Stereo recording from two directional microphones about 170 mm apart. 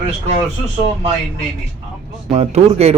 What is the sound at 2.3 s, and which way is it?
Speech, 40° right (ahead or behind).